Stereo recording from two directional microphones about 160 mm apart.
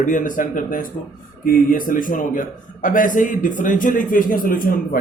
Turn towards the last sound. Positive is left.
turn(degrees=60)  # may be behind; listen again after turning